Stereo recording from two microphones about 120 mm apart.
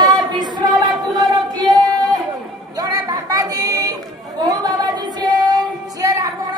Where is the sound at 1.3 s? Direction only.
35° right (ahead or behind).